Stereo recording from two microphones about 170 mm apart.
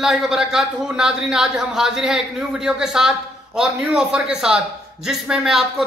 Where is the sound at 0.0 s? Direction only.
Centre (ahead or behind).